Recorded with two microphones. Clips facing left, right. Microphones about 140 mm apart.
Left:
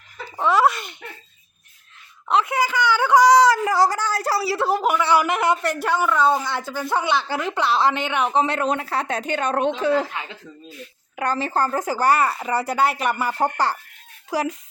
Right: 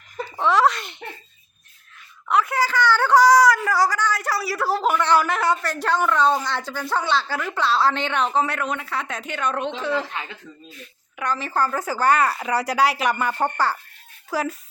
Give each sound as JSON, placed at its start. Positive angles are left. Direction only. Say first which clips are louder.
{"t": 0.3, "sound": "speech", "louder": "even", "side_deg": 5}
{"t": 2.2, "sound": "speech", "louder": "left 1 dB", "side_deg": 25}
{"t": 4.8, "sound": "speech", "louder": "even", "side_deg": 10}
{"t": 11.2, "sound": "a woman's voice", "louder": "left 2 dB", "side_deg": 30}
{"t": 11.9, "sound": "a child's voice", "louder": "right 1 dB", "side_deg": 15}